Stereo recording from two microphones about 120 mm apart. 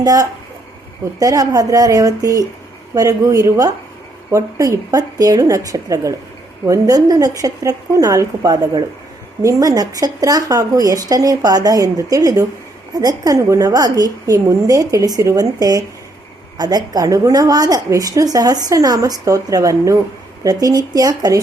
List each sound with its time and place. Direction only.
0.0 s a woman's voice: 30° right (ahead or behind)